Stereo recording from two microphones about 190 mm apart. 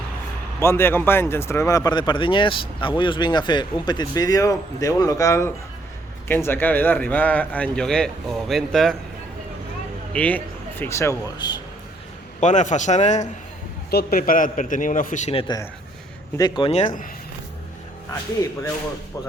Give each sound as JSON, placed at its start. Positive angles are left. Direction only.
{"t": 0.6, "sound": "speech", "side_deg": 10}
{"t": 10.1, "sound": "speech", "side_deg": 5}
{"t": 12.4, "sound": "a man's voice", "side_deg": 40}
{"t": 13.9, "sound": "a man's voice", "side_deg": 50}